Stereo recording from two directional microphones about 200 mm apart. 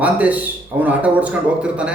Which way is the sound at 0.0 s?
5° right (ahead or behind).